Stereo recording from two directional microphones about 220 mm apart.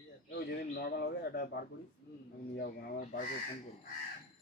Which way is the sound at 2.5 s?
40° left (ahead or behind).